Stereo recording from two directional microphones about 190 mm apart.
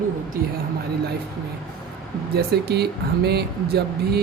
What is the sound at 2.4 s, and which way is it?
Speech, 60° right (ahead or behind).